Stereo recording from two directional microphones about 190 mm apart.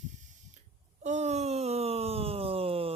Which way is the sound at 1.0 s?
35° right (ahead or behind).